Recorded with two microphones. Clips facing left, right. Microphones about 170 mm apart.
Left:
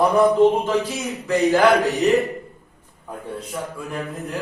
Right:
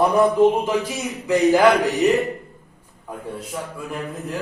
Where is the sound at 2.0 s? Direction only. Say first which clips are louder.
Even; centre (ahead or behind).